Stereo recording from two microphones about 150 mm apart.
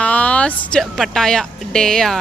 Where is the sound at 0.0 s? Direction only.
10° left (ahead or behind).